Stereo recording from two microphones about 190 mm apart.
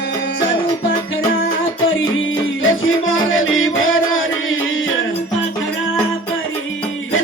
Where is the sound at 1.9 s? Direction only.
90° left.